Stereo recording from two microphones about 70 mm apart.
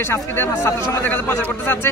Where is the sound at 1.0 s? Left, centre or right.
Left.